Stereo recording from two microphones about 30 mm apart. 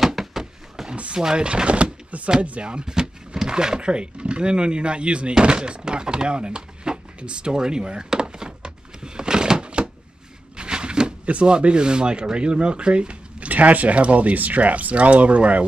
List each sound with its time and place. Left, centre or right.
0.0 s a sound: centre
0.9 s speech: right
1.2 s speech: right
2.6 s speech: right
5.4 s a sound: right
11.4 s rub: right
13.5 s speech: right